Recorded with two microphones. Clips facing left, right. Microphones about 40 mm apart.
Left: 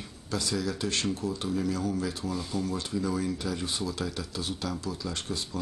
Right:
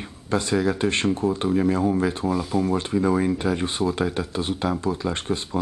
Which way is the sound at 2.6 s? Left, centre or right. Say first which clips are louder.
Right 9 dB; right.